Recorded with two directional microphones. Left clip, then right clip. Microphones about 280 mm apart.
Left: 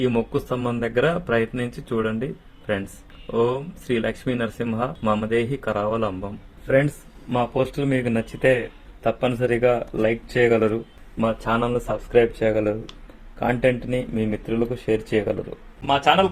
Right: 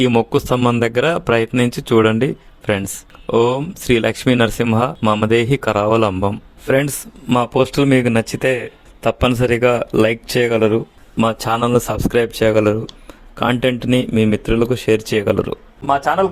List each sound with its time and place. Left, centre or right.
0.0 s speech: right
3.8 s speech: right
15.9 s a man's voice: centre